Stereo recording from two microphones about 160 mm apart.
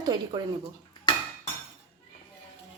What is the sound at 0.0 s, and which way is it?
Speech, 25° right (ahead or behind).